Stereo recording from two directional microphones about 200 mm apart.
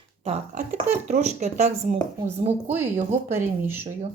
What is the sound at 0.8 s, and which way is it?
Speech, 35° right (ahead or behind).